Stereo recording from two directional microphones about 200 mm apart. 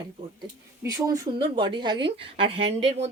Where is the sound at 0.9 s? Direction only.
15° right (ahead or behind).